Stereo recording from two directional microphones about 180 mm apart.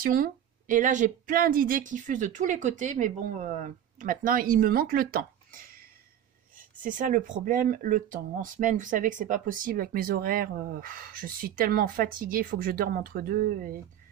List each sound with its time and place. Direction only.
0.0 s speech: 50° right (ahead or behind)